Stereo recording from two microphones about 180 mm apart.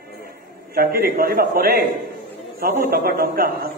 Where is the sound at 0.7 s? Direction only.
55° right (ahead or behind).